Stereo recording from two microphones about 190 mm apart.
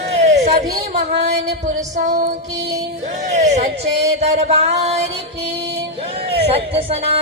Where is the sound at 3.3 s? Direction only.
35° right (ahead or behind).